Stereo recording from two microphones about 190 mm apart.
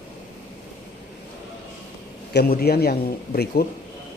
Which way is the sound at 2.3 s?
55° left (ahead or behind).